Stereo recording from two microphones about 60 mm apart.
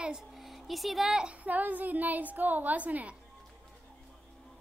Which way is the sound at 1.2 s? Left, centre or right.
Right.